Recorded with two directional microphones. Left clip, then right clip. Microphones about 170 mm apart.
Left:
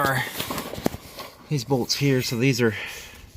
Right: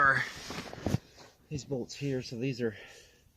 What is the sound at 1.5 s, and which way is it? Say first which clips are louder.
Speech: left 13 dB; 15° left (ahead or behind).